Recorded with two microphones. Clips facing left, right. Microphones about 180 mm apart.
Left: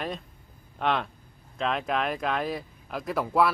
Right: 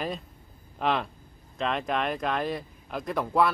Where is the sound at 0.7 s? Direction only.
Centre (ahead or behind).